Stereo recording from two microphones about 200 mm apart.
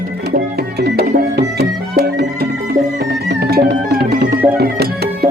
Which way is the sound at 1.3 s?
55° right (ahead or behind).